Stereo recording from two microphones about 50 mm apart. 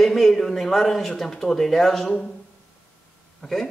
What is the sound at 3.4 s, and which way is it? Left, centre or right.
Speech, centre.